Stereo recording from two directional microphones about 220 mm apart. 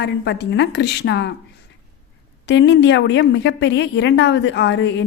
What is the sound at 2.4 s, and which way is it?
A woman's voice, 55° left (ahead or behind).